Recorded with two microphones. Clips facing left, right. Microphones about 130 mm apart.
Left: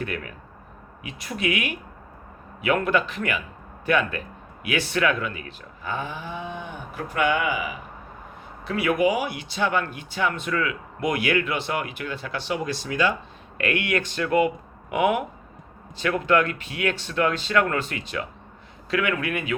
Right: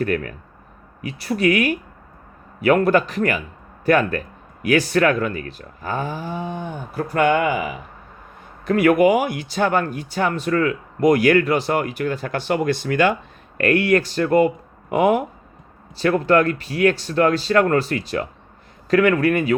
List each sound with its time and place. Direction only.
0.0 s speech: 45° right (ahead or behind)
13.6 s speech: 40° right (ahead or behind)